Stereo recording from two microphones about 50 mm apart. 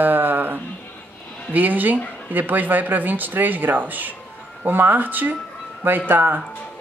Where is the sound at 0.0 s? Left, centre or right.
Right.